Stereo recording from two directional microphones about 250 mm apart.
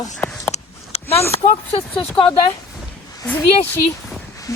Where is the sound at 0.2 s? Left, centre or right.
Centre.